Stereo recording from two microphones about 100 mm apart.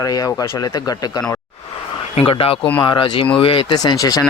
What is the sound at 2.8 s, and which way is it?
Speech, 55° left (ahead or behind).